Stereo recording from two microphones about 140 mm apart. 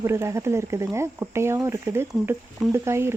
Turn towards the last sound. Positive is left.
turn(degrees=-20)  # may be behind; listen again after turning